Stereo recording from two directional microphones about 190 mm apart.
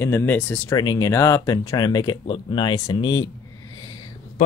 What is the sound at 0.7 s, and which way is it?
Speech, 20° left (ahead or behind).